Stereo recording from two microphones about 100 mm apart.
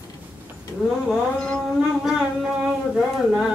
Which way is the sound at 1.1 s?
10° left (ahead or behind).